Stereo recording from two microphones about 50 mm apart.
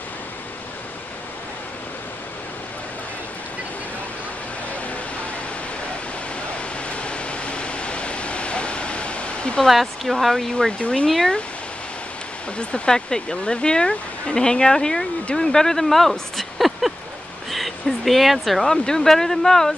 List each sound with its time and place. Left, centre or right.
6.9 s a sound: left
9.7 s speech: centre
10.8 s speech: left
11.1 s speech: centre
12.5 s speech: centre